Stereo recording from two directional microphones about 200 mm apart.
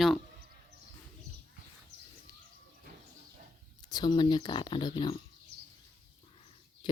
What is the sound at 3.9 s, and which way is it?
Speech, 20° left (ahead or behind).